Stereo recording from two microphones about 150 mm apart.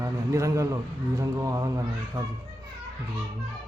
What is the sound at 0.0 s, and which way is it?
A man's voice, 20° right (ahead or behind).